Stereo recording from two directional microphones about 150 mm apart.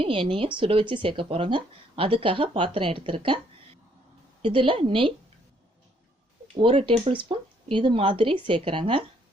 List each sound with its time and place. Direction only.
0.0 s speech: 35° right (ahead or behind)
4.4 s speech: 35° right (ahead or behind)
6.5 s speech: 35° right (ahead or behind)